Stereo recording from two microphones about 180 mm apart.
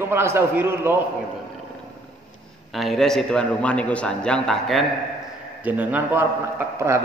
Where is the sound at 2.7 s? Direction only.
Centre (ahead or behind).